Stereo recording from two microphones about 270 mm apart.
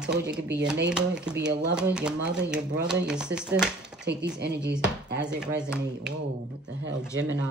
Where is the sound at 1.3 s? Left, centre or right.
Right.